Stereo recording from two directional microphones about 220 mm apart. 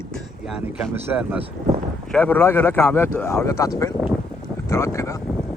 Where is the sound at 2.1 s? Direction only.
5° left (ahead or behind).